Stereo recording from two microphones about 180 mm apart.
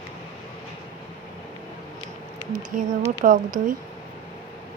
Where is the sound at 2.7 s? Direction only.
45° right (ahead or behind).